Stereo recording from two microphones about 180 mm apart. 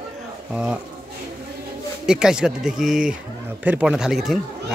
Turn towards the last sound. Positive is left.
turn(degrees=0)  # may be behind; listen again after turning